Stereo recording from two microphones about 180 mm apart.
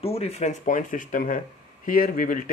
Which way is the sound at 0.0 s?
35° left (ahead or behind).